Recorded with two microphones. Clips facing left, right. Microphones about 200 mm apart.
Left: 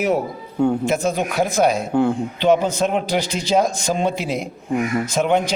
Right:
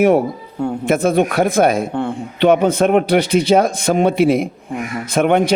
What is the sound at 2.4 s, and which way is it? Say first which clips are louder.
A man's voice: right 5 dB; 55° right (ahead or behind).